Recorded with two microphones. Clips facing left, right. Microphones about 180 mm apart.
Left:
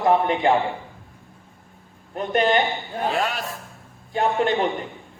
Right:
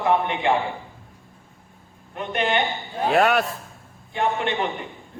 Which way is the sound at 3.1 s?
60° right (ahead or behind).